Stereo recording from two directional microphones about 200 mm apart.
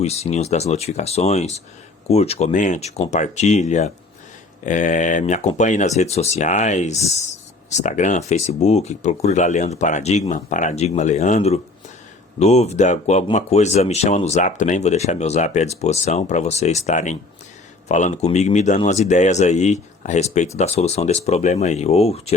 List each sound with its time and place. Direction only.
0.0 s speech: 30° left (ahead or behind)